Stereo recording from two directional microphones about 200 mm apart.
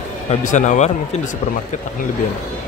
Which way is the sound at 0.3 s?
40° left (ahead or behind).